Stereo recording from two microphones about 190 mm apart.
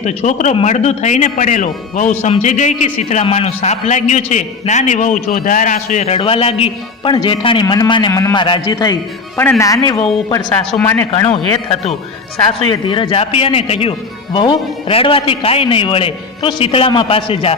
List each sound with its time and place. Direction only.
0.0 s a man's voice: 40° left (ahead or behind)
10.8 s speech: 10° left (ahead or behind)
11.3 s a man's voice: 30° left (ahead or behind)